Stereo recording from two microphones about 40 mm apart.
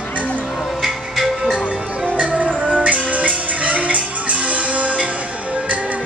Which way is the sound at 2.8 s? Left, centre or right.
Right.